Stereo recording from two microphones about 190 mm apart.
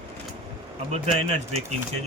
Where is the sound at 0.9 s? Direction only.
35° right (ahead or behind).